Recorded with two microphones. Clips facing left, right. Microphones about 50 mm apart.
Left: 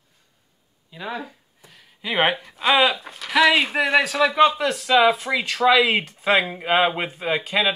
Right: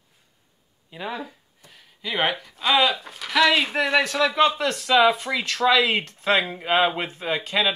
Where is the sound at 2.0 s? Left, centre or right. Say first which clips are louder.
Left 3 dB; centre.